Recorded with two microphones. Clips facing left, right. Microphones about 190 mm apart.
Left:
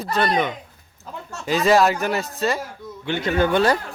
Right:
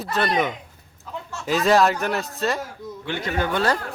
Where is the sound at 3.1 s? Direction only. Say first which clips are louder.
Left 5 dB; 25° left (ahead or behind).